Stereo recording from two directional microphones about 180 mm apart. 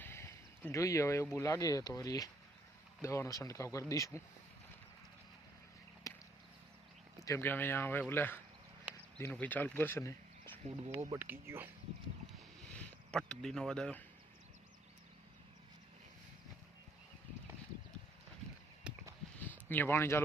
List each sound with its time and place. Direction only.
0.0 s speech: 10° left (ahead or behind)
6.0 s chop: 20° left (ahead or behind)
7.3 s speech: 15° left (ahead or behind)
10.6 s speech: 35° right (ahead or behind)
11.1 s speech: 15° right (ahead or behind)
12.7 s speech: 5° left (ahead or behind)
18.9 s a sound: 5° right (ahead or behind)
19.4 s speech: 10° left (ahead or behind)